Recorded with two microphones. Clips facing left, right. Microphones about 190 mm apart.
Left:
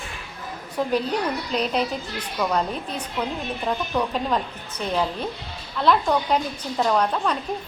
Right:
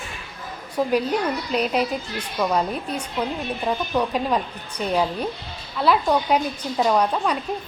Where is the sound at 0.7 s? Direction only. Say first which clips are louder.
Right 2 dB; 10° right (ahead or behind).